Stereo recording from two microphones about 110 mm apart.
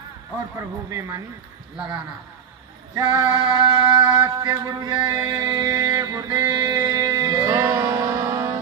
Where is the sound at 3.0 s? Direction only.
45° right (ahead or behind).